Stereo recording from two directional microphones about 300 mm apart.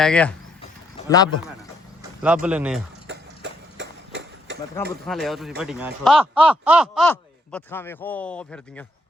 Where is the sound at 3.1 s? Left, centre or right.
Right.